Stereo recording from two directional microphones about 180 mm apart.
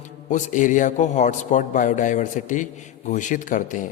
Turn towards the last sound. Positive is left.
turn(degrees=45)  # may be behind; listen again after turning